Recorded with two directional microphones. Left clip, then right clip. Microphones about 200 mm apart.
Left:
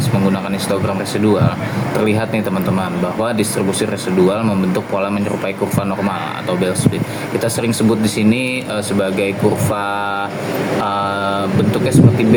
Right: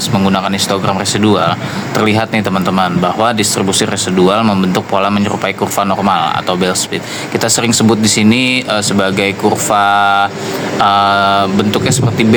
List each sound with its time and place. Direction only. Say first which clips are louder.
1.2 s speech: right 3 dB; 45° right (ahead or behind)